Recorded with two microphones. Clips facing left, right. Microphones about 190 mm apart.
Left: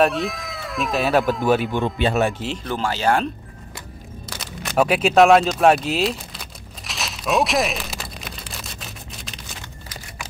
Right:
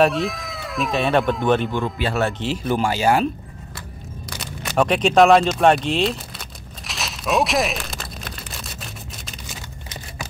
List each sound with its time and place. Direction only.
0.0 s speech: centre (ahead or behind)
1.8 s speech: 20° left (ahead or behind)
2.3 s speech: centre (ahead or behind)
2.6 s speech: 10° right (ahead or behind)
4.3 s speech: centre (ahead or behind)
6.9 s a sound: centre (ahead or behind)